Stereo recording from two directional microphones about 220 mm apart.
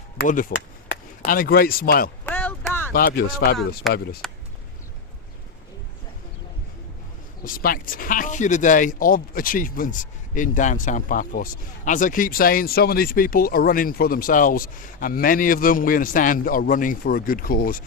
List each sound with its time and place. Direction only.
0.2 s speech: 40° left (ahead or behind)
2.2 s a sound: 10° left (ahead or behind)
2.9 s speech: 45° left (ahead or behind)
7.4 s speech: 40° left (ahead or behind)